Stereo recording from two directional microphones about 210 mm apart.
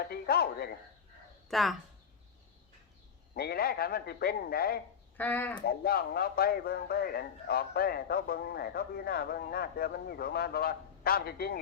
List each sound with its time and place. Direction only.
0.0 s a sound: 45° left (ahead or behind)
1.5 s speech: centre (ahead or behind)
3.3 s speech: 45° left (ahead or behind)
5.1 s speech: 10° left (ahead or behind)
5.6 s speech: 45° left (ahead or behind)